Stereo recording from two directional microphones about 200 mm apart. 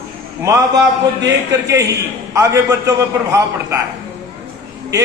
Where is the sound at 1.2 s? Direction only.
15° right (ahead or behind).